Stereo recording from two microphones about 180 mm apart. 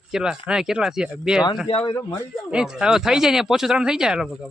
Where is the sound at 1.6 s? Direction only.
30° left (ahead or behind).